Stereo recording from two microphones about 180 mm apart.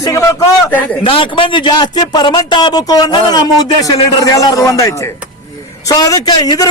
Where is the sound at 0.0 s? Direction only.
15° left (ahead or behind).